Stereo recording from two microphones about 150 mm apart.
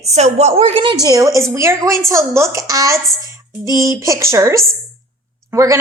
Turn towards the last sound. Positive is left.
turn(degrees=-20)  # may be behind; listen again after turning